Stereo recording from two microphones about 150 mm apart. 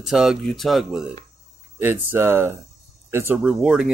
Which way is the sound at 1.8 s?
15° right (ahead or behind).